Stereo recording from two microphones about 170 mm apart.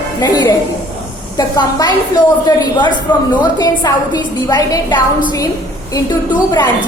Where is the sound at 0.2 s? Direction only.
25° left (ahead or behind).